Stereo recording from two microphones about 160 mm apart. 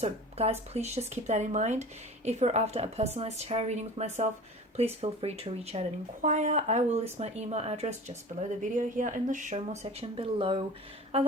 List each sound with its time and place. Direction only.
0.0 s speech: 40° right (ahead or behind)
10.0 s speech: 35° right (ahead or behind)